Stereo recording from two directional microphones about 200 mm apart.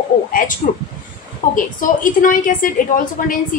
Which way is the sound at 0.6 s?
40° left (ahead or behind).